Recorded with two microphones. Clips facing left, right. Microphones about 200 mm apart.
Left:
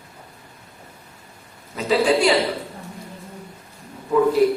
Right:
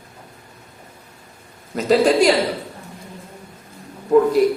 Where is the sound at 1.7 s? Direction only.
45° right (ahead or behind).